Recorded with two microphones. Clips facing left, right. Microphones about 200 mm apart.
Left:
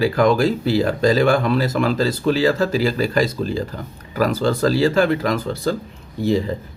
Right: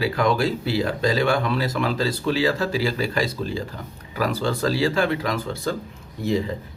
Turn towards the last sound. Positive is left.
turn(degrees=35)  # may be behind; listen again after turning